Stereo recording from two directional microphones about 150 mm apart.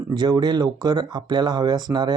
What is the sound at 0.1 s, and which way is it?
Speech, 30° right (ahead or behind).